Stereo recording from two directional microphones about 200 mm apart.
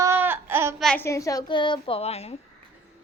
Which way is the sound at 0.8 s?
10° left (ahead or behind).